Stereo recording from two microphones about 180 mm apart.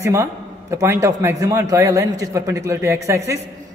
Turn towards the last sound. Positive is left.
turn(degrees=-15)  # may be behind; listen again after turning